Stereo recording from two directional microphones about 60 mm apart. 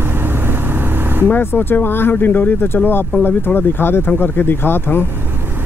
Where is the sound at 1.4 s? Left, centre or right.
Left.